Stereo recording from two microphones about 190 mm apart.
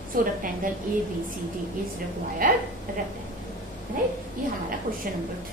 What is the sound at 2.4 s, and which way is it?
Speech, 50° right (ahead or behind).